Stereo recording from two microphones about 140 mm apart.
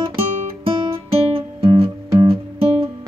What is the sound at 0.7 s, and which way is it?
Music, 40° right (ahead or behind).